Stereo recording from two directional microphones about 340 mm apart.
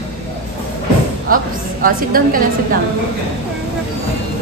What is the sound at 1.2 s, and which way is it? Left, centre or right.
A woman's voice, right.